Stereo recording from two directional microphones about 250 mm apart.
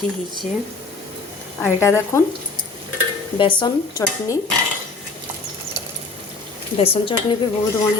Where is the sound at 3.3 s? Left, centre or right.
Centre.